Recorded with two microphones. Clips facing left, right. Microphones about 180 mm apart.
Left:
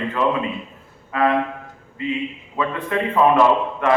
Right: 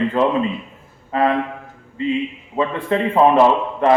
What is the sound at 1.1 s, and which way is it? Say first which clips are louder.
Music: right 2 dB; 30° right (ahead or behind).